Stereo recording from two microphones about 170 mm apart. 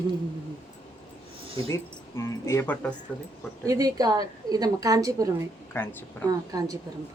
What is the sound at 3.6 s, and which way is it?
A woman's voice, 20° right (ahead or behind).